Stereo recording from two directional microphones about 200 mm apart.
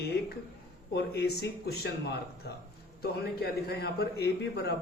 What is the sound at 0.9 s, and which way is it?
A man's voice, 55° left (ahead or behind).